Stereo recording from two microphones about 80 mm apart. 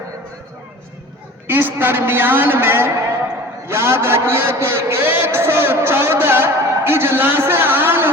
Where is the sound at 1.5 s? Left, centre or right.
Right.